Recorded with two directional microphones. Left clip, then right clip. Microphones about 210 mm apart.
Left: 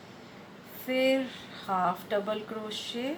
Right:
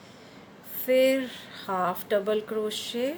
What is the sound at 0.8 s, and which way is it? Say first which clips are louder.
Speech: right 5 dB; 55° right (ahead or behind).